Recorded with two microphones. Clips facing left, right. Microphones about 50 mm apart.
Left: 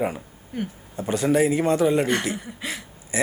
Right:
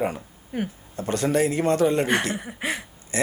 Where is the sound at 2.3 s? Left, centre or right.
Right.